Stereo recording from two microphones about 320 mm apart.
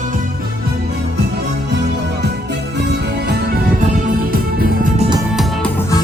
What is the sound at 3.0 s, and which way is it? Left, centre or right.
Music, right.